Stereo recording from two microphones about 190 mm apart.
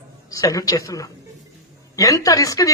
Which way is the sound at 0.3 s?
15° left (ahead or behind).